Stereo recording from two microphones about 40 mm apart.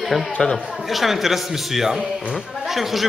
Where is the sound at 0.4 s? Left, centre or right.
Centre.